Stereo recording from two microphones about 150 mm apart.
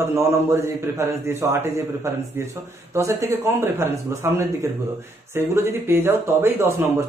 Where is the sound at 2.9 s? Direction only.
20° right (ahead or behind).